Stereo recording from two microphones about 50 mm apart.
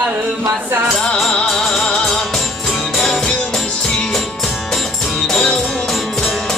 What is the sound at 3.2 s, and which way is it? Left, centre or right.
Music, centre.